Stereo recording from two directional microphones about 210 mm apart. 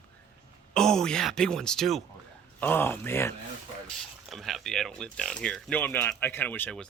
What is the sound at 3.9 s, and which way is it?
Speech, centre (ahead or behind).